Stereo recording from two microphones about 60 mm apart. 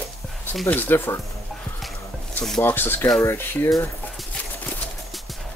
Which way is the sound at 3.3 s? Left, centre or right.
Left.